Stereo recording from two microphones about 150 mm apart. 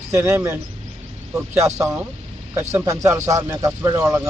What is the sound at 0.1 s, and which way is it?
Speech, 15° right (ahead or behind).